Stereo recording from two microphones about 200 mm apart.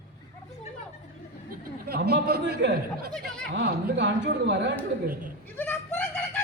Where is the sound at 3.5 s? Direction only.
60° right (ahead or behind).